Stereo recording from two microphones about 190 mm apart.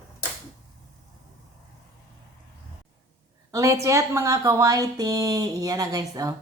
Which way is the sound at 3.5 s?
15° right (ahead or behind).